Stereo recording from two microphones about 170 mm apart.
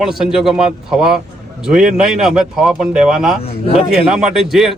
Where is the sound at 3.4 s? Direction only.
35° left (ahead or behind).